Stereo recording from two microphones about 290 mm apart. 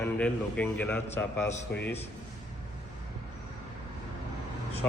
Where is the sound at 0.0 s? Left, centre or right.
Centre.